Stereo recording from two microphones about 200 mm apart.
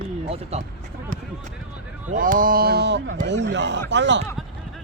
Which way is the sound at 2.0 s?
40° right (ahead or behind).